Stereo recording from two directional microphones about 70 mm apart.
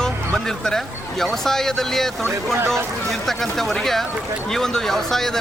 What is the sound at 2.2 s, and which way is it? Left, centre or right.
Speech, right.